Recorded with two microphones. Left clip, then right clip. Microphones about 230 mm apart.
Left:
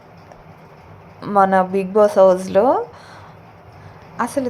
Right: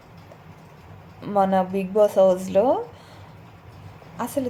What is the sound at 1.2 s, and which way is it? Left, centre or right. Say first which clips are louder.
A woman's voice: left 6 dB; centre.